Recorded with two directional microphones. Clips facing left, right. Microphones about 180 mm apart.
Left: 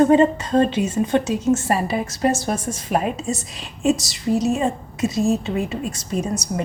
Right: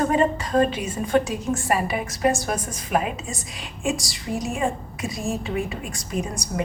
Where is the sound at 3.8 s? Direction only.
25° left (ahead or behind).